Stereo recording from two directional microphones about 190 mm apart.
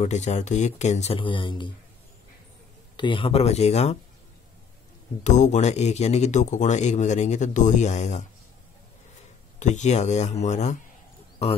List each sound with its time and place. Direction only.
0.0 s a man's voice: 35° left (ahead or behind)
3.0 s a man's voice: 25° left (ahead or behind)
5.2 s a man's voice: 40° left (ahead or behind)
9.6 s a man's voice: 40° left (ahead or behind)